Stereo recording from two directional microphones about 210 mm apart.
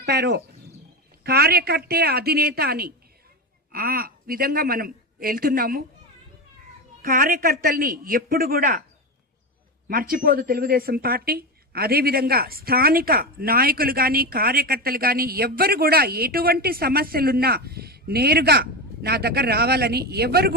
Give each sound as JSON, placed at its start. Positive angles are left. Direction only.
{"t": 0.0, "sound": "speech", "side_deg": -50}
{"t": 7.0, "sound": "speech", "side_deg": -40}
{"t": 9.9, "sound": "speech", "side_deg": -45}